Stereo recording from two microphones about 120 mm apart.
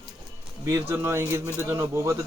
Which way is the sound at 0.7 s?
20° right (ahead or behind).